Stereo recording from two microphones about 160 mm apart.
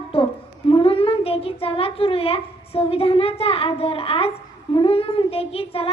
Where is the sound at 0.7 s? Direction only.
35° left (ahead or behind).